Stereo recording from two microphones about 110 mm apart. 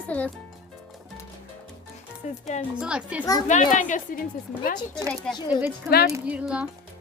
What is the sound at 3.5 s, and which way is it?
Speech, 90° left.